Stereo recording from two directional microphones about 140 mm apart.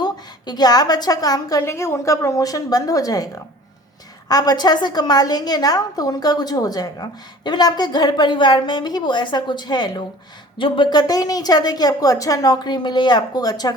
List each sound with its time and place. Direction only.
0.0 s a woman's voice: 30° left (ahead or behind)